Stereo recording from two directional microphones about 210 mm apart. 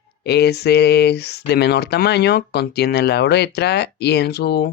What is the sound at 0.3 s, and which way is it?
Speech, 50° left (ahead or behind).